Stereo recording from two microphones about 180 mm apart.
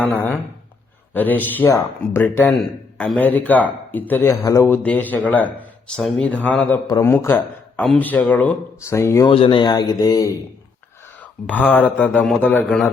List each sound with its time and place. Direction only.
0.0 s a man's voice: 10° left (ahead or behind)
9.3 s speech: 30° left (ahead or behind)
11.2 s a man's voice: 10° left (ahead or behind)